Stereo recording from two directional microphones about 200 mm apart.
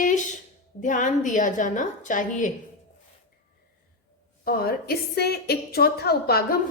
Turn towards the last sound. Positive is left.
turn(degrees=50)  # may be behind; listen again after turning